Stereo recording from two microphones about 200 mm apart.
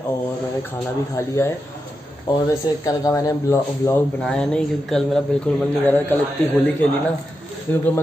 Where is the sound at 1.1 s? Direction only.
15° left (ahead or behind).